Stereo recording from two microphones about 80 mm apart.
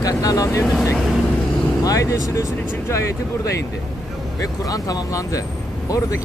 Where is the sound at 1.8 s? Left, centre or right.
Left.